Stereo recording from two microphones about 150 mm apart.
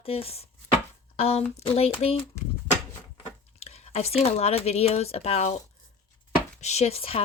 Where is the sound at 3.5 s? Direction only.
45° left (ahead or behind).